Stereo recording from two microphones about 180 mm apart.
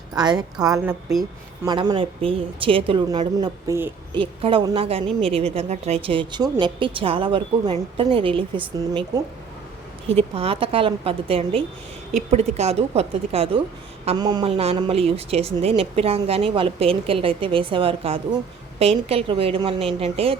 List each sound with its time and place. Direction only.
0.1 s a woman's voice: 20° right (ahead or behind)